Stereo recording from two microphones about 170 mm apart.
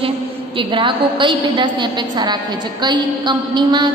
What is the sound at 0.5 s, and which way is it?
A woman's voice, 30° right (ahead or behind).